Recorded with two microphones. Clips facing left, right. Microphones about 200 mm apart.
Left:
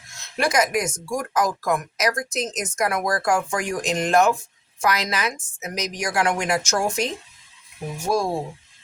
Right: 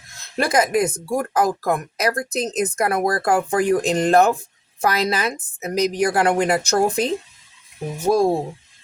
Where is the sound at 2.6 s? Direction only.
60° right (ahead or behind).